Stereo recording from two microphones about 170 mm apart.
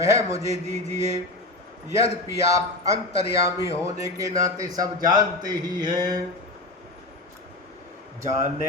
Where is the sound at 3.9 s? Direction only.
20° right (ahead or behind).